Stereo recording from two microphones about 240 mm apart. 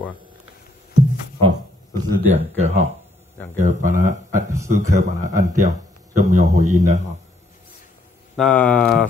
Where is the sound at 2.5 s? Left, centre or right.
Right.